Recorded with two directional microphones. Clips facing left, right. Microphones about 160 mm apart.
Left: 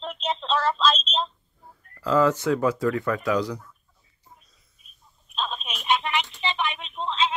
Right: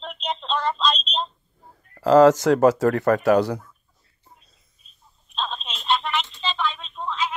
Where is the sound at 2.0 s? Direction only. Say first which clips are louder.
Right 7 dB; 80° right; by 3.5 s 65° right (ahead or behind).